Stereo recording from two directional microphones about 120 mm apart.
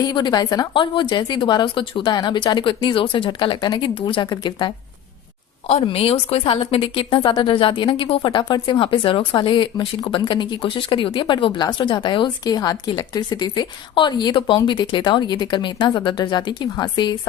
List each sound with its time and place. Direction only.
0.0 s speech: 35° left (ahead or behind)
5.6 s a woman's voice: 55° left (ahead or behind); by 17.2 s 40° left (ahead or behind)